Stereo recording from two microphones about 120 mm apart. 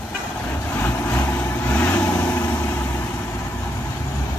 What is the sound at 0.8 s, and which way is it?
Vehicle, 15° left (ahead or behind).